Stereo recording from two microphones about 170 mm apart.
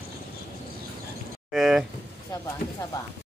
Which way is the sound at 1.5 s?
Centre (ahead or behind).